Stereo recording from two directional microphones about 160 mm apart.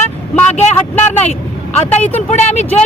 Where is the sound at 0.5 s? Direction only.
45° left (ahead or behind).